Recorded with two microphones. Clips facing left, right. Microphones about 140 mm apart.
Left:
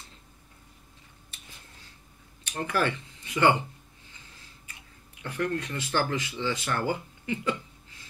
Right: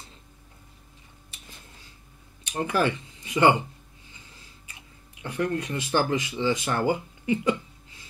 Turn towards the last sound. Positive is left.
turn(degrees=-15)  # may be behind; listen again after turning